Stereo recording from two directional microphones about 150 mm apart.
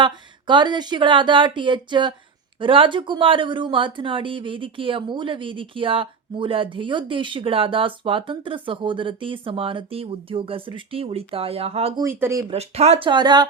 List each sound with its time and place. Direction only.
0.0 s speech: 30° right (ahead or behind)
11.9 s speech: 20° right (ahead or behind)
12.5 s speech: 45° right (ahead or behind)